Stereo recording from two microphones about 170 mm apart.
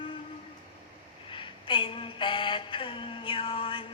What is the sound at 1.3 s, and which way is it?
Mantra, 30° left (ahead or behind).